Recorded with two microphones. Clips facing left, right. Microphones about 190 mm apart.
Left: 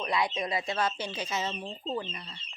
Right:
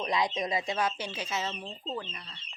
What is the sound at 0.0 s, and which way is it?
Speech, 15° right (ahead or behind).